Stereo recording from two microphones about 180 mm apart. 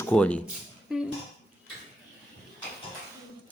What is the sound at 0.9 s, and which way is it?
Dishes, 5° right (ahead or behind).